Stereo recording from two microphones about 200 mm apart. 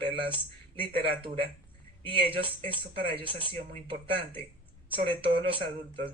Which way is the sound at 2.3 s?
25° right (ahead or behind).